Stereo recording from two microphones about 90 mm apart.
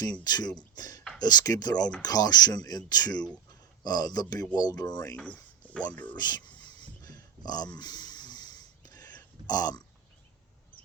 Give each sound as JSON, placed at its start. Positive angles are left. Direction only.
{"t": 0.3, "sound": "speech", "side_deg": 50}
{"t": 0.8, "sound": "a sound", "side_deg": 45}
{"t": 1.2, "sound": "speech", "side_deg": 45}
{"t": 5.1, "sound": "speech", "side_deg": 15}
{"t": 6.1, "sound": "a sound", "side_deg": 50}
{"t": 9.5, "sound": "speech", "side_deg": 45}